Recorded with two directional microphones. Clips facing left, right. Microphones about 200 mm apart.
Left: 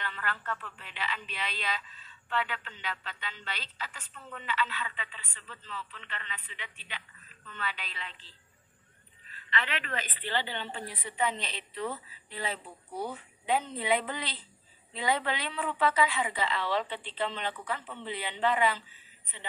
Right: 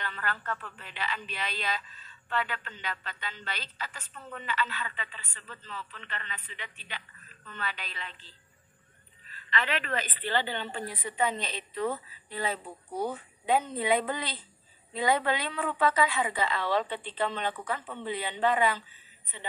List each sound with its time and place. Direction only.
0.0 s a woman's voice: 45° right (ahead or behind)
9.3 s a woman's voice: 40° right (ahead or behind)